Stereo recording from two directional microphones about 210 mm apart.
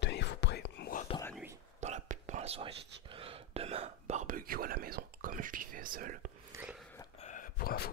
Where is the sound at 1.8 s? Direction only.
35° right (ahead or behind).